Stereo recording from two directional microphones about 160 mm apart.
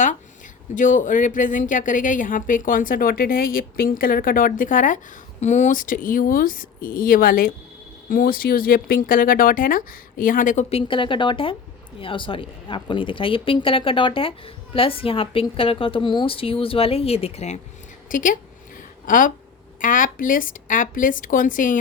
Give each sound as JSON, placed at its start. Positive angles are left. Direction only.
{"t": 0.8, "sound": "a woman's voice", "side_deg": 55}
{"t": 18.1, "sound": "a woman's voice", "side_deg": 55}